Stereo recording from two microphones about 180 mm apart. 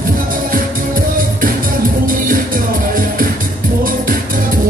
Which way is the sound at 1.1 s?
50° right (ahead or behind).